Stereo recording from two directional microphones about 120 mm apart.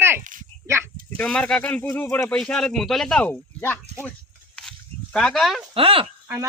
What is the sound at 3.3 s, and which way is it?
Speech, 15° left (ahead or behind).